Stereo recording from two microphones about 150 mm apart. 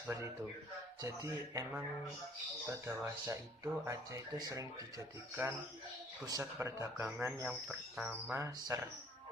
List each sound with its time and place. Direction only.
1.0 s speech: 20° right (ahead or behind)
7.4 s speech: 5° right (ahead or behind)
8.3 s speech: 20° right (ahead or behind)